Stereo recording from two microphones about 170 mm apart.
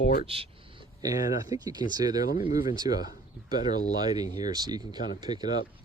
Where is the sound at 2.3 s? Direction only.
55° left (ahead or behind).